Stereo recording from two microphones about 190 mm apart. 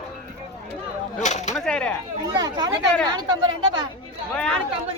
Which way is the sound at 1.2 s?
40° left (ahead or behind).